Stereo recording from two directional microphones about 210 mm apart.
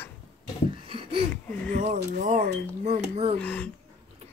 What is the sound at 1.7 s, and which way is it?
Speech, 35° right (ahead or behind).